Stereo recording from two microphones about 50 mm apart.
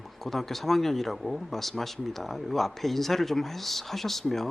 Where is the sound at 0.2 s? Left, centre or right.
Centre.